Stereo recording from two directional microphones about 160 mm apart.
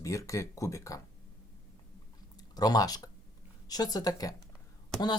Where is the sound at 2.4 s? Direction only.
25° left (ahead or behind).